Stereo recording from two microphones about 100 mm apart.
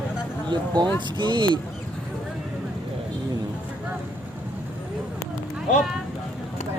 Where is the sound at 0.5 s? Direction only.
45° right (ahead or behind).